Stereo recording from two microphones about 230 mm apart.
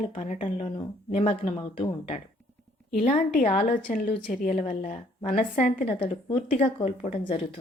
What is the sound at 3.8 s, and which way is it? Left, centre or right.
A woman's voice, left.